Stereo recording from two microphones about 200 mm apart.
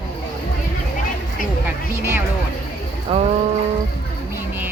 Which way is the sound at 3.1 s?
30° right (ahead or behind).